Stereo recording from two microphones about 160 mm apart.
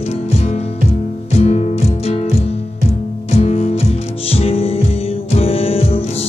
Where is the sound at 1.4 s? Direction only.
45° left (ahead or behind).